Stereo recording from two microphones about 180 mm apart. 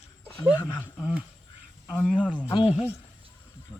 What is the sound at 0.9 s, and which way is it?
Speech, 5° right (ahead or behind).